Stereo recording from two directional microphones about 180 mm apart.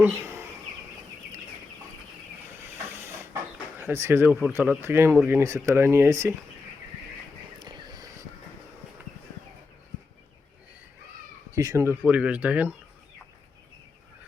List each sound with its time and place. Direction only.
0.0 s a sound: 10° right (ahead or behind)
2.9 s hiss: 15° right (ahead or behind)
3.8 s speech: 15° right (ahead or behind)
7.6 s a sound: 25° right (ahead or behind)
11.5 s speech: 15° right (ahead or behind)
12.0 s speech: 5° right (ahead or behind)